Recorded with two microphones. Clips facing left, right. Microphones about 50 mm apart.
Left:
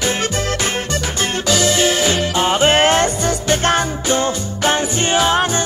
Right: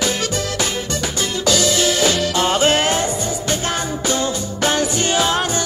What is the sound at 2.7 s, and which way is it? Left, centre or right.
Music, left.